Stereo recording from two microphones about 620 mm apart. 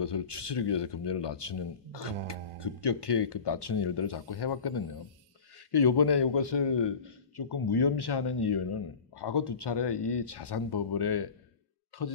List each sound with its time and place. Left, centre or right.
0.0 s speech: left